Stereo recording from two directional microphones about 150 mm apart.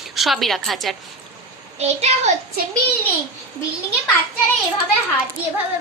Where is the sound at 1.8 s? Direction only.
45° right (ahead or behind).